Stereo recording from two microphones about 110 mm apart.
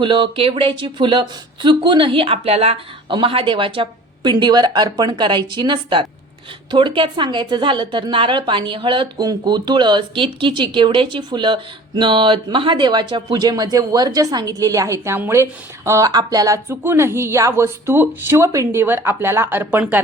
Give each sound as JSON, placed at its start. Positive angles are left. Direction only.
{"t": 0.0, "sound": "a woman's voice", "side_deg": -50}
{"t": 3.1, "sound": "a woman's voice", "side_deg": -50}